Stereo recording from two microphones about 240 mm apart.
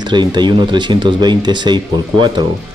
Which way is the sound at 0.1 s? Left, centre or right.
Centre.